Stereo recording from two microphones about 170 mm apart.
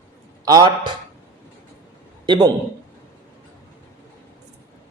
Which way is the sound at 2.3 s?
25° right (ahead or behind).